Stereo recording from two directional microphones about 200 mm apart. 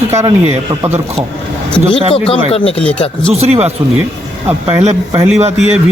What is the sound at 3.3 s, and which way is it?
Speech, 30° right (ahead or behind).